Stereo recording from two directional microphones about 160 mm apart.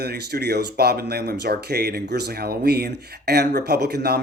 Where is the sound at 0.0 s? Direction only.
90° right.